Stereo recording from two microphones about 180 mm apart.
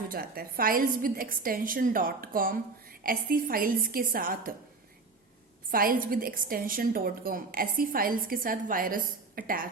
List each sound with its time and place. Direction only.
0.1 s a woman's voice: 55° right (ahead or behind)
5.7 s a woman's voice: 55° right (ahead or behind)